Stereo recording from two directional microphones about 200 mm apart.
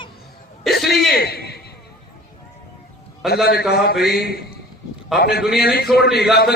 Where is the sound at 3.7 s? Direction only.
55° left (ahead or behind).